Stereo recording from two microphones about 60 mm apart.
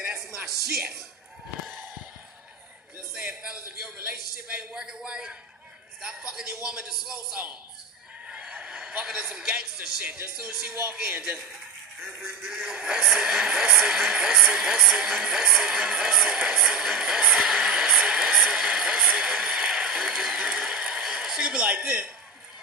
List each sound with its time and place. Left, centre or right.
0.0 s music: centre
3.2 s a sound: centre
6.0 s speech: centre
8.3 s a sound: centre
9.0 s speech: centre
12.0 s music: centre
13.2 s speech: centre